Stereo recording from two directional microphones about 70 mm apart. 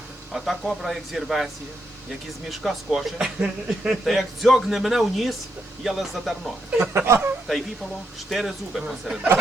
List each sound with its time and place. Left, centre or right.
0.3 s speech: centre
2.5 s speech: centre
4.0 s speech: centre
6.7 s speech: centre
7.4 s speech: centre